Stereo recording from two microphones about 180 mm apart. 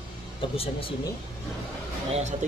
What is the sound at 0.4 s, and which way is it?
Speech, 30° left (ahead or behind).